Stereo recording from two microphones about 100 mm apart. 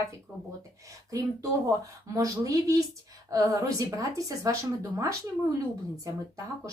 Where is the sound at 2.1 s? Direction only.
35° right (ahead or behind).